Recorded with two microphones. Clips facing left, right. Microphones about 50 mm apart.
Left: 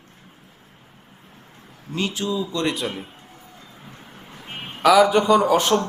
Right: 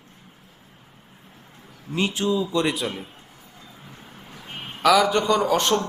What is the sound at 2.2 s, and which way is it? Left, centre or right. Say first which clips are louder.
Speech: right 4 dB; right.